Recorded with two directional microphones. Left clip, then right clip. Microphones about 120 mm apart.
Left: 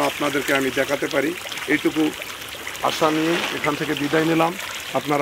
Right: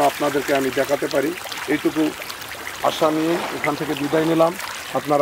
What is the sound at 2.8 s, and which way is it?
Speech, 45° left (ahead or behind).